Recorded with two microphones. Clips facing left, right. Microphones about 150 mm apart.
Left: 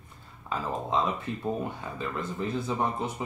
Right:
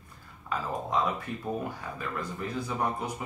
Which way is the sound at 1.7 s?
25° left (ahead or behind).